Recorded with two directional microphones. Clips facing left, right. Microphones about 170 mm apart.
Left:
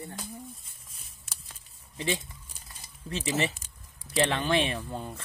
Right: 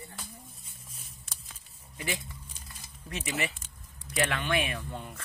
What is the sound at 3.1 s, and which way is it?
Speech, 30° left (ahead or behind).